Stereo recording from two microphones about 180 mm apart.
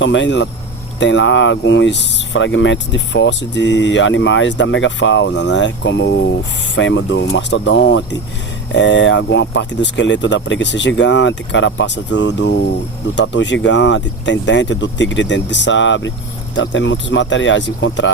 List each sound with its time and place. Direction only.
0.0 s speech: 90° left; by 6.3 s 70° left (ahead or behind)
6.7 s speech: 90° left